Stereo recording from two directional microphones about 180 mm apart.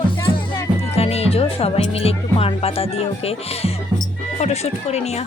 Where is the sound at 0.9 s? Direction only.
35° left (ahead or behind).